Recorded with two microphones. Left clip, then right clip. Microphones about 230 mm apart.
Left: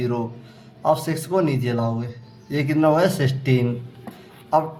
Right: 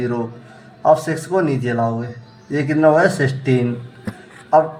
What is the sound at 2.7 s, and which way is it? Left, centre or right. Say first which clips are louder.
Speech: right 5 dB; left.